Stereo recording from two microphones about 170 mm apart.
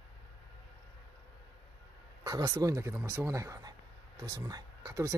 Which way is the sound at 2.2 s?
20° right (ahead or behind).